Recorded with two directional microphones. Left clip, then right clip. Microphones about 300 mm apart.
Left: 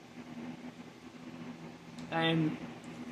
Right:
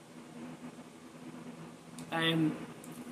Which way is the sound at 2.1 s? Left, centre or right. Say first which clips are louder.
Even; centre.